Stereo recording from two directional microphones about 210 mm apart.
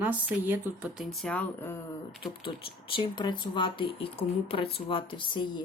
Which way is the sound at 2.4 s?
25° left (ahead or behind).